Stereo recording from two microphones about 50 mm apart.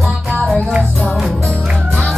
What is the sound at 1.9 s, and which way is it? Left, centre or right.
Music, centre.